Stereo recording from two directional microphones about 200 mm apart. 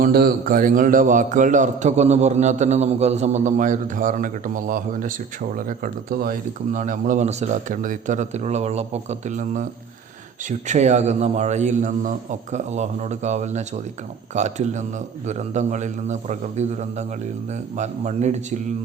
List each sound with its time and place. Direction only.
0.0 s a man's voice: 50° right (ahead or behind)
10.7 s a man's voice: 35° right (ahead or behind)